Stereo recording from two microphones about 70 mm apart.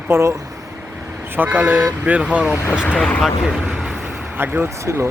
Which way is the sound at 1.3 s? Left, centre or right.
Right.